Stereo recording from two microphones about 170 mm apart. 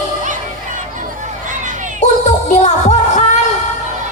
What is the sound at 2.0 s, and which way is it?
Music, 45° left (ahead or behind).